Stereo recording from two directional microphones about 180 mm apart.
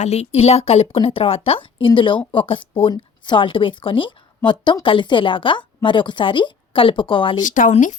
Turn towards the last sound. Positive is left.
turn(degrees=45)  # may be behind; listen again after turning